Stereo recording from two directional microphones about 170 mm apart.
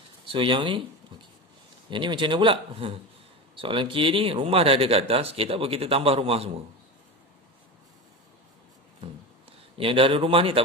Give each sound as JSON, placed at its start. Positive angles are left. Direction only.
{"t": 0.3, "sound": "speech", "side_deg": -30}
{"t": 1.9, "sound": "speech", "side_deg": -30}
{"t": 9.5, "sound": "a man's voice", "side_deg": -35}